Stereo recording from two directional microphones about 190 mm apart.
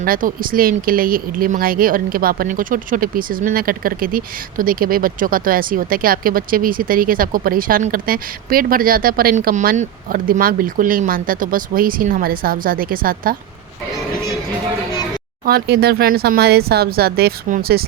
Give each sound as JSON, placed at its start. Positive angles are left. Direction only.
{"t": 0.0, "sound": "speech", "side_deg": -50}
{"t": 15.4, "sound": "speech", "side_deg": -55}